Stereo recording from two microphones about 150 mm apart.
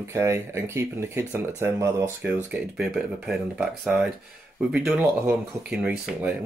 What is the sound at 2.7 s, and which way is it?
Speech, 5° right (ahead or behind).